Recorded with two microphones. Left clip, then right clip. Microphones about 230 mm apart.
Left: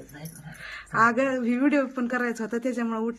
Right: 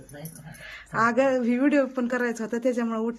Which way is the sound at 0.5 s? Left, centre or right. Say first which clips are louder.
Left 3 dB; centre.